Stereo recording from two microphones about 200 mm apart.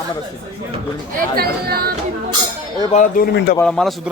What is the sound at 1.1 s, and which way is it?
Speech, 50° right (ahead or behind).